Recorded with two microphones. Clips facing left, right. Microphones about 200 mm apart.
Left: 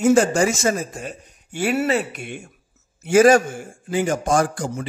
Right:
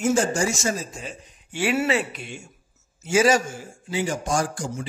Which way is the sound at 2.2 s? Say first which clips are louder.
Left 4 dB; 55° left (ahead or behind).